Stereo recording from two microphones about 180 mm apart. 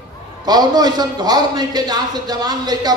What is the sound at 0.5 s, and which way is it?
A man's voice, 20° right (ahead or behind).